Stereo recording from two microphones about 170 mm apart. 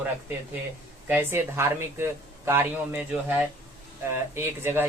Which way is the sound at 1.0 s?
15° right (ahead or behind).